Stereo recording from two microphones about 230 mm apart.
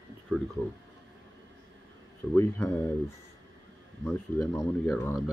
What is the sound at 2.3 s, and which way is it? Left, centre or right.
Speech, centre.